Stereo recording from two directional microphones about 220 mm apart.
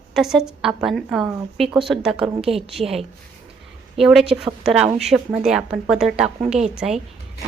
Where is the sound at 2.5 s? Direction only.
25° right (ahead or behind).